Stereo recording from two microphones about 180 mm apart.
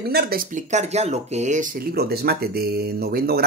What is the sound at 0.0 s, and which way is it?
Speech, 60° right (ahead or behind).